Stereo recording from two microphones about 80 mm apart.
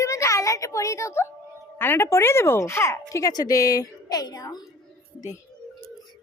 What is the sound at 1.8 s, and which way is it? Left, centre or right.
Speech, left.